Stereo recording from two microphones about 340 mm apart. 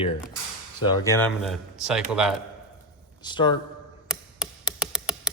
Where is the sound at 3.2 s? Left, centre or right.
Centre.